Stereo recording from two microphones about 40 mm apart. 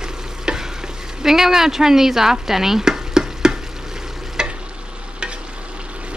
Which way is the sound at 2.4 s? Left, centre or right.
Centre.